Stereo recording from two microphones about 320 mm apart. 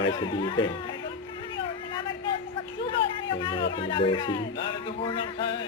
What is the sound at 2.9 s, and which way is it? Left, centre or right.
A man's voice, centre.